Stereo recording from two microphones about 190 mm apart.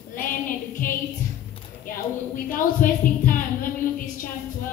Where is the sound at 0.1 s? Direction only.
45° left (ahead or behind).